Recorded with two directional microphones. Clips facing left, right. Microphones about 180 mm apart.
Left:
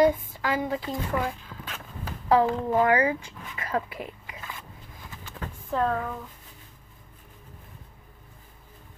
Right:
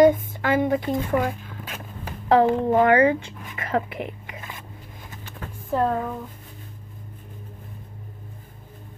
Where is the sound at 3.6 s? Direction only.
60° right (ahead or behind).